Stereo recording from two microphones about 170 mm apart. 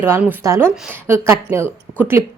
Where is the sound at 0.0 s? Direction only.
10° right (ahead or behind).